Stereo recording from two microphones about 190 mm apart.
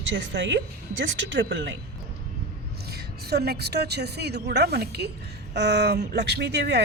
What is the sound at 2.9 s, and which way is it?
Speech, 55° right (ahead or behind).